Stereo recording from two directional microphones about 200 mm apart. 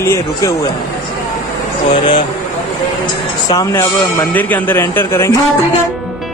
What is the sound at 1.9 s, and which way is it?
Speech, 25° left (ahead or behind).